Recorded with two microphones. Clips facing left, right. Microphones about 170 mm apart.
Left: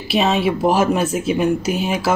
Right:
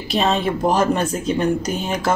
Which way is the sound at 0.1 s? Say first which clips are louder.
Left 2 dB; 5° left (ahead or behind).